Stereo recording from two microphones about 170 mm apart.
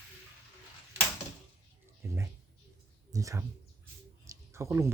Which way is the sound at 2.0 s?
15° right (ahead or behind).